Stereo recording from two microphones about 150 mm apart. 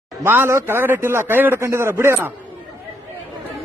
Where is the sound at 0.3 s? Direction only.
15° right (ahead or behind).